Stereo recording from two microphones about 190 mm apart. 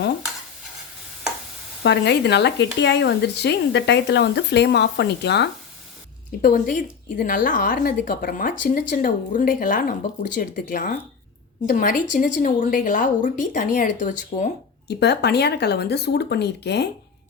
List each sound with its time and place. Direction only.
1.8 s speech: 65° left (ahead or behind)
6.4 s a woman's voice: 45° left (ahead or behind)
14.8 s speech: 60° left (ahead or behind)